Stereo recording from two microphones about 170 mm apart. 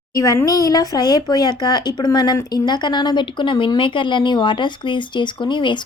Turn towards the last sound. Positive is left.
turn(degrees=25)  # may be behind; listen again after turning